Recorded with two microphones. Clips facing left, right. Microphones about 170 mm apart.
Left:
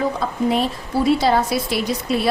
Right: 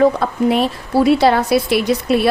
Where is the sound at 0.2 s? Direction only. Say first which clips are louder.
Right 4 dB; 65° right (ahead or behind).